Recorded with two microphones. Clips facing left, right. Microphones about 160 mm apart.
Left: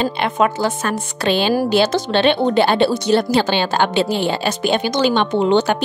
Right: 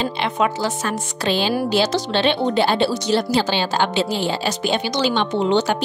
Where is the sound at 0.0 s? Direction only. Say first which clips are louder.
Left 3 dB; 55° left (ahead or behind).